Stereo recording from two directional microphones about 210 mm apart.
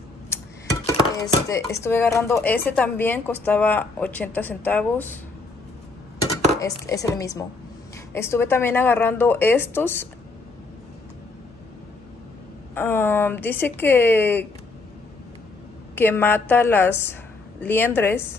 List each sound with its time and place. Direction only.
0.9 s speech: 15° left (ahead or behind)
6.6 s speech: 15° left (ahead or behind)
12.7 s speech: 10° left (ahead or behind)
15.9 s a woman's voice: 10° left (ahead or behind)